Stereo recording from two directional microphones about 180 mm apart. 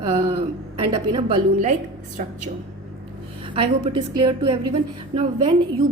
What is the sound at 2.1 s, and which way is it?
Speech, 45° right (ahead or behind).